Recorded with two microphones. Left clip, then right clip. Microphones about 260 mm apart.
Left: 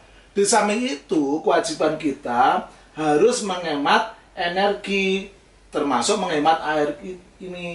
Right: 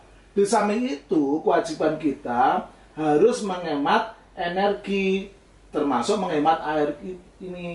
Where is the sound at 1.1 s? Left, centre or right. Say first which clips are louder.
Left 1 dB; right.